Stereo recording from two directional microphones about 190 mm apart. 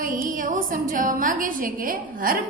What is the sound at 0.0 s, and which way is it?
A woman's voice, 50° right (ahead or behind).